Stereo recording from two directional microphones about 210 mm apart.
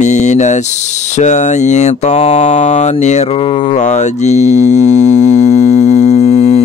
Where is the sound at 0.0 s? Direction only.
35° left (ahead or behind).